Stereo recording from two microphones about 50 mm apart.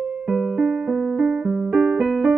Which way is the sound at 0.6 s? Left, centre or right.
Right.